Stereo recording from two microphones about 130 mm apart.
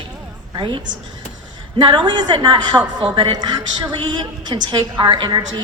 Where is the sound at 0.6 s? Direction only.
40° right (ahead or behind).